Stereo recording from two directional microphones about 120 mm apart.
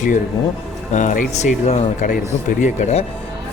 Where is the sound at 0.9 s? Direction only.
80° left.